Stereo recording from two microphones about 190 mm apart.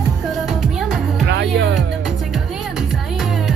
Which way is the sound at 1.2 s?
65° right (ahead or behind).